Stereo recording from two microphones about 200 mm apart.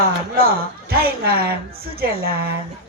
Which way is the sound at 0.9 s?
50° right (ahead or behind).